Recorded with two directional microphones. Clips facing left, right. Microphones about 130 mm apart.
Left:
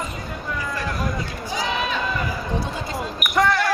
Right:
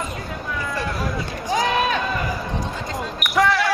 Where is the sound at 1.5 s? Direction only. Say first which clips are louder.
Right 5 dB; 50° right (ahead or behind).